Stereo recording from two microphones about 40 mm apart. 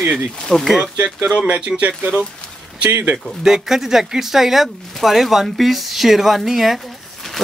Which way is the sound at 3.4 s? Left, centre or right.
Centre.